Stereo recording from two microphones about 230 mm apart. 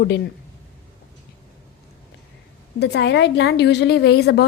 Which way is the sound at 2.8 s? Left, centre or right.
Left.